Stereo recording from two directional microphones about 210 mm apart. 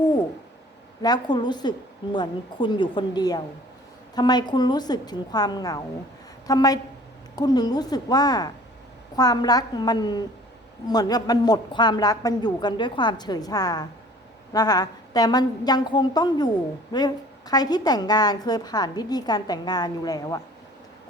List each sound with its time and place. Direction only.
1.0 s a woman's voice: 20° left (ahead or behind)